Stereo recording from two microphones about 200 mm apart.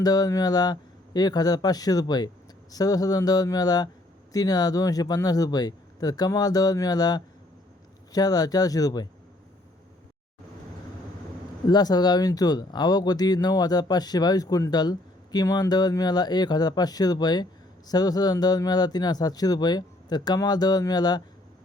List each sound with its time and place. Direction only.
0.0 s speech: 20° left (ahead or behind)
11.7 s speech: 20° left (ahead or behind)